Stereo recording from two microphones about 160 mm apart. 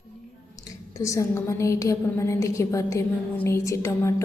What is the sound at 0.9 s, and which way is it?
A woman's voice, 20° left (ahead or behind).